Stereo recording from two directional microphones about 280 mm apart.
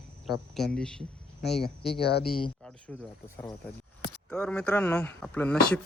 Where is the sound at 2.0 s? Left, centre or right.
Left.